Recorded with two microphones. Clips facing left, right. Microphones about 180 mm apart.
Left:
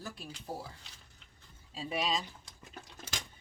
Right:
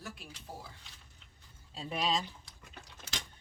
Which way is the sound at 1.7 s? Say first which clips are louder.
Even; 5° left (ahead or behind).